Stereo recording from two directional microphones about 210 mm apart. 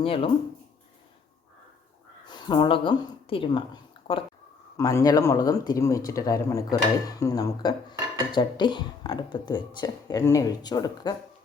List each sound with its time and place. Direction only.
0.0 s speech: 25° left (ahead or behind)
2.2 s speech: 20° left (ahead or behind)
4.8 s speech: 15° left (ahead or behind)